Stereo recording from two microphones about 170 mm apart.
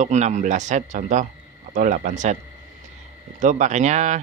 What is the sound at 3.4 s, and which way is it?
Speech, 45° right (ahead or behind).